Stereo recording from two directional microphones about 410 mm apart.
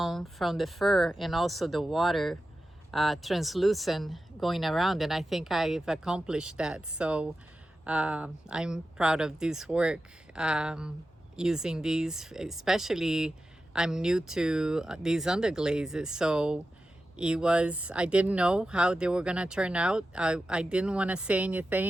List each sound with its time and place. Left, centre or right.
0.0 s speech: centre